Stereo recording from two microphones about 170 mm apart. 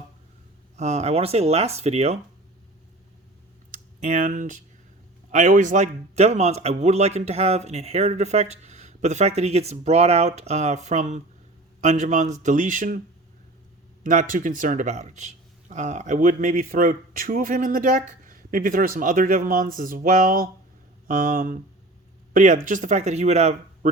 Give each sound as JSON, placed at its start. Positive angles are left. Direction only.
{"t": 0.8, "sound": "a man's voice", "side_deg": -40}
{"t": 4.0, "sound": "a man's voice", "side_deg": -45}
{"t": 14.0, "sound": "a man's voice", "side_deg": -50}